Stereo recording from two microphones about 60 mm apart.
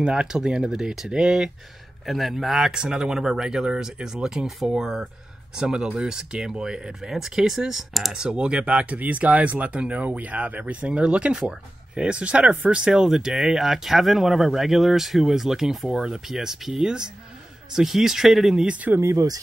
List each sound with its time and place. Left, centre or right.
0.0 s speech: centre
2.7 s speech: centre
8.1 s speech: centre
18.7 s speech: right
18.9 s speech: right